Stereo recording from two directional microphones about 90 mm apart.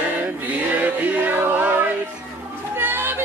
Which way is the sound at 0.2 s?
20° right (ahead or behind).